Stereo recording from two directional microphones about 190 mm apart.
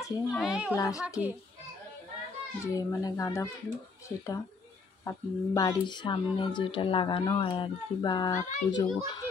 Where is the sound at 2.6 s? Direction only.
20° left (ahead or behind).